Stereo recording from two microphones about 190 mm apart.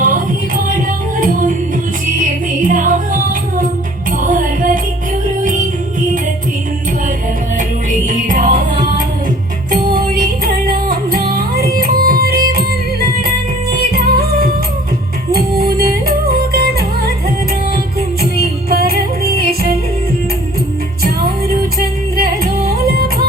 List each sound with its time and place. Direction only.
1.2 s music: 45° right (ahead or behind)
7.9 s music: 45° right (ahead or behind)
18.7 s music: 50° right (ahead or behind)
22.2 s music: 50° right (ahead or behind)